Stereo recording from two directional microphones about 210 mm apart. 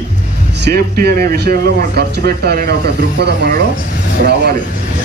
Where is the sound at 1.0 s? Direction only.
50° right (ahead or behind).